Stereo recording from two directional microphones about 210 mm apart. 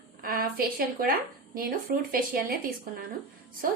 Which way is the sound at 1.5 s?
40° right (ahead or behind).